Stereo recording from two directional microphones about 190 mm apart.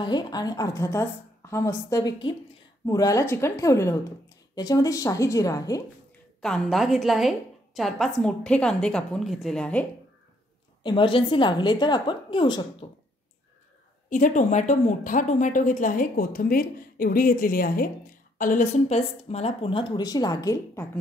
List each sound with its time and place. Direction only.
0.0 s a woman's voice: 20° left (ahead or behind)
6.4 s a woman's voice: centre (ahead or behind)
10.8 s a woman's voice: 25° left (ahead or behind)
14.0 s a woman's voice: 40° left (ahead or behind); by 21.0 s 15° left (ahead or behind)